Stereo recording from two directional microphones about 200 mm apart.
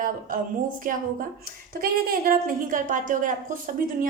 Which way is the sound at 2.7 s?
40° right (ahead or behind).